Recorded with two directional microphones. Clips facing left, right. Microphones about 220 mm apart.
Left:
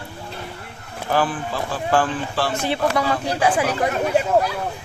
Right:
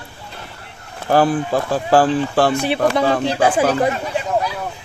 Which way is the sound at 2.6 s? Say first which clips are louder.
Right 4 dB; 15° right (ahead or behind).